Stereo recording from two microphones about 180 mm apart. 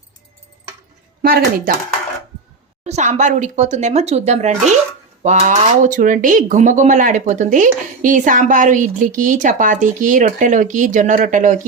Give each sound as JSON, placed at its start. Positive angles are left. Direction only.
{"t": 1.2, "sound": "speech", "side_deg": -55}
{"t": 2.8, "sound": "speech", "side_deg": -40}